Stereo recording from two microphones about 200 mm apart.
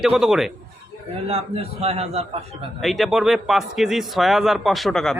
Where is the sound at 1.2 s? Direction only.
30° right (ahead or behind).